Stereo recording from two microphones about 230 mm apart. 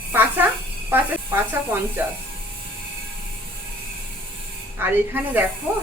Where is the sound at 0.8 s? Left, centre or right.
Centre.